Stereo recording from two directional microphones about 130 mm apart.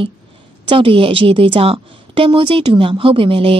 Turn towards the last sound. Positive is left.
turn(degrees=-45)  # may be behind; listen again after turning